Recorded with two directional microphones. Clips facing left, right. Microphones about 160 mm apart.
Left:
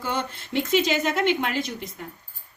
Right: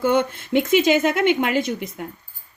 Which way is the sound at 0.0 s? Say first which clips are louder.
Right 10 dB; 55° right (ahead or behind).